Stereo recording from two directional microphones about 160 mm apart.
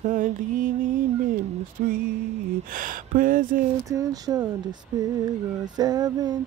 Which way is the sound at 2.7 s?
60° right (ahead or behind).